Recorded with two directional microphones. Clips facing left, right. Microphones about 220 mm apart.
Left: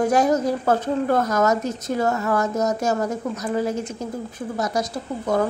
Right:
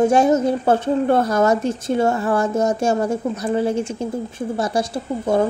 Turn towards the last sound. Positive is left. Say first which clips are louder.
# right 3 dB
turn(degrees=-30)  # may be behind; listen again after turning